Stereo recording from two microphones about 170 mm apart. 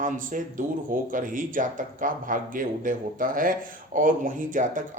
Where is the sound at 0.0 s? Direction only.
50° right (ahead or behind).